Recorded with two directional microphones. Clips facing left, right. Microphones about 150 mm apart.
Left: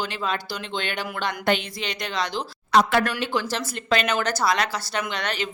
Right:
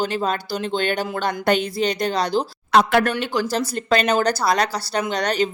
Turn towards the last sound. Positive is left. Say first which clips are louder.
# right 7 dB
turn(degrees=-40)  # may be behind; listen again after turning